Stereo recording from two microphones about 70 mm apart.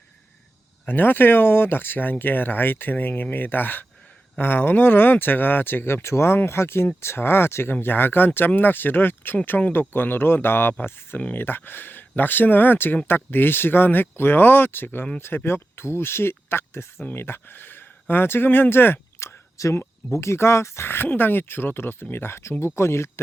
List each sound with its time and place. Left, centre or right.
0.9 s speech: left
19.5 s speech: left